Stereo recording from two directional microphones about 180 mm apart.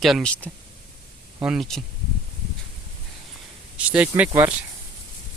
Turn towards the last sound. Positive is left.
turn(degrees=-10)  # may be behind; listen again after turning